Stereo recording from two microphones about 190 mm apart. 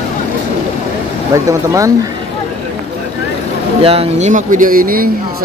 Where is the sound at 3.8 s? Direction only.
30° right (ahead or behind); by 5.1 s 50° right (ahead or behind).